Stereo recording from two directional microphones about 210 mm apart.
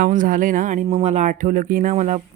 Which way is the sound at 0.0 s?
40° right (ahead or behind).